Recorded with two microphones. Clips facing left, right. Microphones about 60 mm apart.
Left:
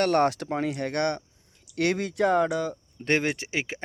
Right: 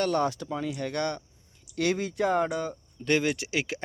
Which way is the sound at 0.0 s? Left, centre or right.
Left.